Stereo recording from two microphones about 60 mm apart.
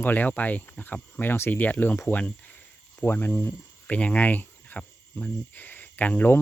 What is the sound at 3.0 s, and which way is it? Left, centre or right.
Cricket, left.